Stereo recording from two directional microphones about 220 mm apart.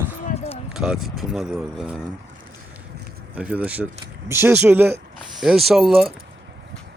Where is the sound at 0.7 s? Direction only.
Centre (ahead or behind).